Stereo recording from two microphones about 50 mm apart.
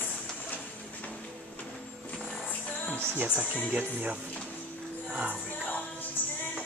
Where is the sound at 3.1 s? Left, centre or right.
Right.